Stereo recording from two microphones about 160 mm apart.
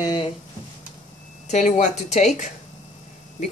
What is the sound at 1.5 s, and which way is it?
Speech, 50° left (ahead or behind).